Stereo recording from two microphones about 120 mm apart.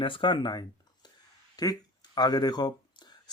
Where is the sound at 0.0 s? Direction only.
45° left (ahead or behind).